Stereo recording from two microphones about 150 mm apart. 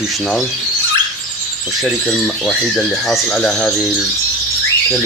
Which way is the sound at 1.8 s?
Centre (ahead or behind).